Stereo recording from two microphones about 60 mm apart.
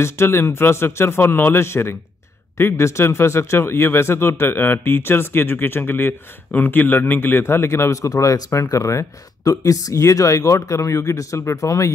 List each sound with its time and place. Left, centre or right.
0.0 s a man's voice: left